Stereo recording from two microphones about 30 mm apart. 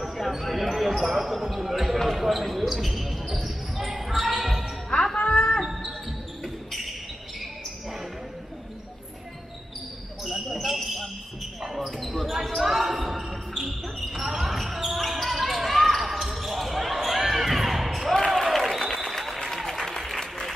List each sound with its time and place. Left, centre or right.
0.0 s basketball bounce: centre
0.4 s speech: centre
2.6 s basketball bounce: centre
5.1 s a sound: left
6.4 s basketball bounce: centre
10.2 s a sound: centre
11.8 s basketball bounce: centre
18.3 s applause: centre